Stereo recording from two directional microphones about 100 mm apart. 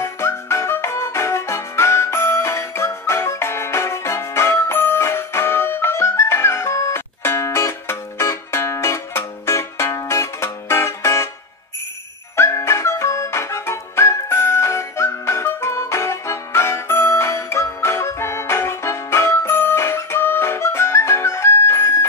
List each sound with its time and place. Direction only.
0.0 s music: 30° left (ahead or behind)
12.4 s music: 25° left (ahead or behind)